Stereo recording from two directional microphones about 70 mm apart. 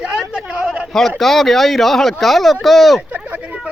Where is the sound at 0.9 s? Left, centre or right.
Centre.